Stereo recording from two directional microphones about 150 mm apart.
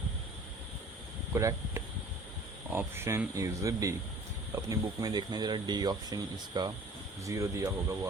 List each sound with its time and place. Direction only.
1.3 s speech: 20° right (ahead or behind)